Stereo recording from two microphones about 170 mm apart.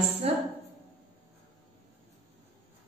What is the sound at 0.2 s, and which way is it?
Speech, 35° right (ahead or behind).